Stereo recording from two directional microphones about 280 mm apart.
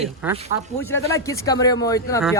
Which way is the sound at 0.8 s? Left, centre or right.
Centre.